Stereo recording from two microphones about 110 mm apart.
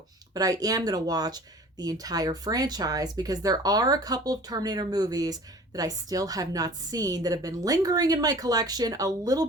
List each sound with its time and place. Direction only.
0.3 s speech: 35° right (ahead or behind)